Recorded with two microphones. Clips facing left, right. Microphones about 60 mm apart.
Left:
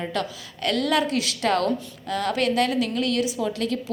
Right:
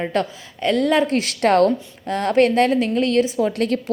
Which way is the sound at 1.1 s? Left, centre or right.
Right.